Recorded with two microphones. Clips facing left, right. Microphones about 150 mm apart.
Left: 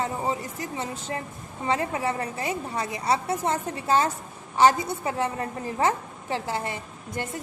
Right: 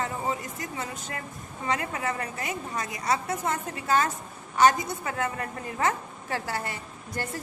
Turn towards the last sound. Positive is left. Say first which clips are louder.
# left 1 dB
turn(degrees=20)  # may be behind; listen again after turning